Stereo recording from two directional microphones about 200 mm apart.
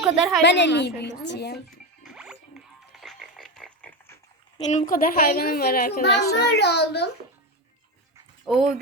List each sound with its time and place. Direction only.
0.0 s a woman's voice: centre (ahead or behind)
0.4 s a woman's voice: 60° left (ahead or behind)
2.0 s music: 5° right (ahead or behind)
4.5 s a woman's voice: 35° left (ahead or behind); by 7.1 s 55° left (ahead or behind)
8.4 s a woman's voice: centre (ahead or behind)